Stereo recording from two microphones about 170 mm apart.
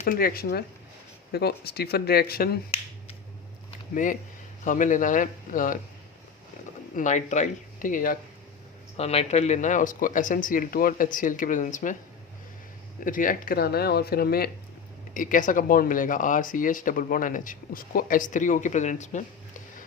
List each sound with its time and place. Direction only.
0.0 s speech: 60° left (ahead or behind)
3.9 s speech: 50° left (ahead or behind)
6.9 s speech: 45° left (ahead or behind)
9.0 s speech: 40° left (ahead or behind)
13.1 s speech: 55° left (ahead or behind)
15.1 s speech: 50° left (ahead or behind)